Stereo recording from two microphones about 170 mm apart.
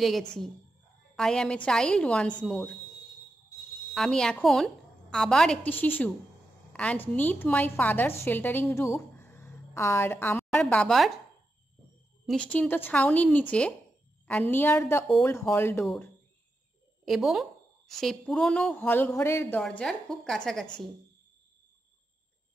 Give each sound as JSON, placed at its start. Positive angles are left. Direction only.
{"t": 0.0, "sound": "a woman's voice", "side_deg": 5}
{"t": 3.9, "sound": "a woman's voice", "side_deg": 5}
{"t": 12.3, "sound": "speech", "side_deg": 5}
{"t": 17.0, "sound": "a woman's voice", "side_deg": 0}